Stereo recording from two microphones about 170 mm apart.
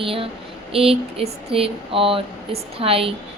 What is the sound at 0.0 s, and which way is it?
Speech, 30° right (ahead or behind).